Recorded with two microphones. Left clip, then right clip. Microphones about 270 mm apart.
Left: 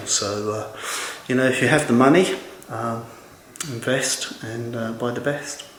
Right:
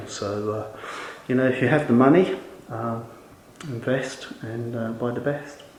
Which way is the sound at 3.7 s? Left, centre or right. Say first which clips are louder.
Left 3 dB; centre.